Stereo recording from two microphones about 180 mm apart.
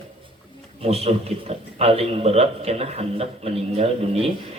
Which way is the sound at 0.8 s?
35° right (ahead or behind).